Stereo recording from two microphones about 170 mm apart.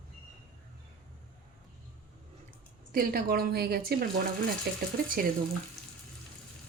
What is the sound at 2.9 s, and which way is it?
A woman's voice, 60° right (ahead or behind).